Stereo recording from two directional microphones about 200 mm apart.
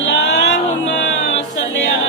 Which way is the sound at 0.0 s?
60° left (ahead or behind).